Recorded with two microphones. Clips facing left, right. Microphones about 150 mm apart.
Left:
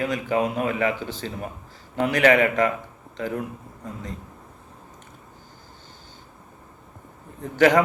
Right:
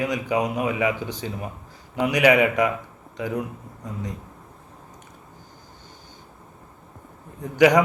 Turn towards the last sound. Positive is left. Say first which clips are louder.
# right 1 dB
turn(degrees=-15)  # may be behind; listen again after turning